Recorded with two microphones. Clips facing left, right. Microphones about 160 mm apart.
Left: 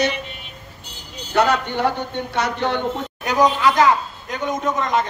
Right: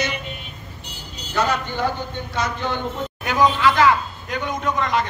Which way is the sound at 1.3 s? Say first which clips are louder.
Left 4 dB; 65° left (ahead or behind).